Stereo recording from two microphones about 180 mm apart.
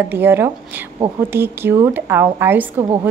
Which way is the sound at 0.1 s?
10° right (ahead or behind).